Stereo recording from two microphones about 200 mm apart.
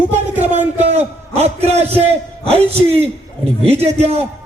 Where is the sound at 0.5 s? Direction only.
35° right (ahead or behind).